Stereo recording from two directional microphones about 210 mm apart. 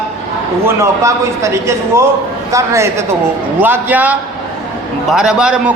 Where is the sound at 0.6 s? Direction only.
15° right (ahead or behind).